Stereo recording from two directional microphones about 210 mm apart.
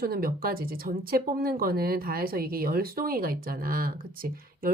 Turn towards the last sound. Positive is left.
turn(degrees=-45)  # may be behind; listen again after turning